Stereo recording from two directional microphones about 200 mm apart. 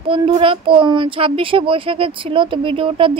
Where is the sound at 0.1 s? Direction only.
25° right (ahead or behind).